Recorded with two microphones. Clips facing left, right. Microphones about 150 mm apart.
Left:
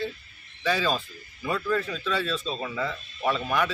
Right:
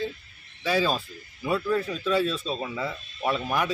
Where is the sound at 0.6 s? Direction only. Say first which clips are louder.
Right 1 dB; 10° right (ahead or behind).